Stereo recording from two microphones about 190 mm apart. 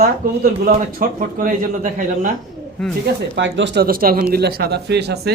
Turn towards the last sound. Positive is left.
turn(degrees=-60)  # may be behind; listen again after turning